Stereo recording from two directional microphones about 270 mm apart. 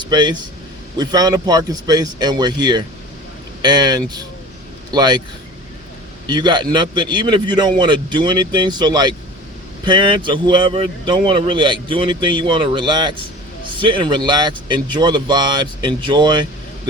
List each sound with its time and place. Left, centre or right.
0.0 s a man's voice: centre
6.2 s a man's voice: centre